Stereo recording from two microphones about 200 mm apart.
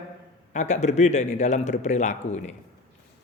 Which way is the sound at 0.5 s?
35° left (ahead or behind).